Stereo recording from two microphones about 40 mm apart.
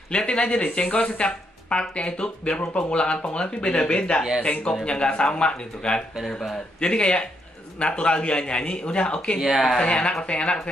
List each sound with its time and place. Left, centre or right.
0.1 s speech: left
9.4 s speech: centre
9.8 s speech: left